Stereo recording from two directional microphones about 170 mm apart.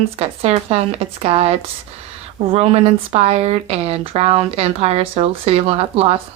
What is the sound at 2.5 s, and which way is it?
Speech, 35° right (ahead or behind).